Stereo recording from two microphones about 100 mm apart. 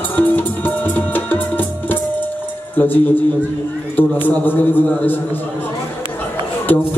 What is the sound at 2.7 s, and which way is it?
Speech, 20° left (ahead or behind).